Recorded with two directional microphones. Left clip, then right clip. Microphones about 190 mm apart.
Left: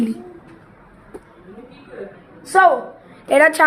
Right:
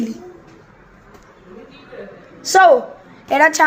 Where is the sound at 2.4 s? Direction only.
55° right (ahead or behind).